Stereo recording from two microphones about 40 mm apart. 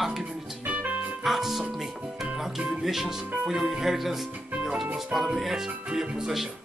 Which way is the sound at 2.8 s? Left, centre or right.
Centre.